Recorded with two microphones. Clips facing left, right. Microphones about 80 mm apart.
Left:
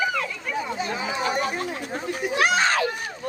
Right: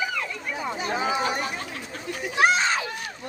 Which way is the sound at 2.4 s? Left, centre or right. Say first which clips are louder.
Even; left.